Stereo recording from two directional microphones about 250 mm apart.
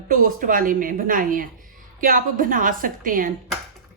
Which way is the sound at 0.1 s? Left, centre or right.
Right.